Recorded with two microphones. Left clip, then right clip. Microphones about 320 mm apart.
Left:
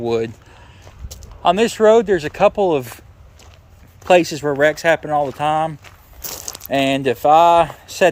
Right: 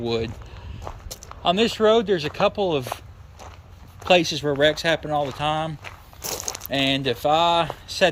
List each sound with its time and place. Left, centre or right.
0.0 s speech: centre
1.4 s speech: centre
4.1 s speech: centre